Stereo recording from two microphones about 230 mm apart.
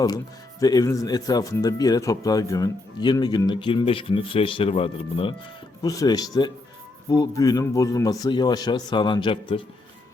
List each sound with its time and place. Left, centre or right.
0.6 s speech: centre